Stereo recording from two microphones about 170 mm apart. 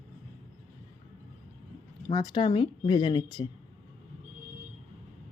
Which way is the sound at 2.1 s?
25° left (ahead or behind).